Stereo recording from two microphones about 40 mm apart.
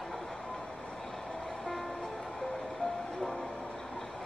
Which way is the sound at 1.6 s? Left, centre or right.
Centre.